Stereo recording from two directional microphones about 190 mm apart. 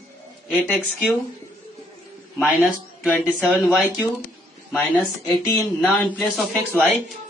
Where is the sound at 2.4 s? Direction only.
Centre (ahead or behind).